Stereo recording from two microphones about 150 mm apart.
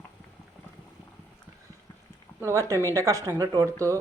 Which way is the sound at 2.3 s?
20° right (ahead or behind).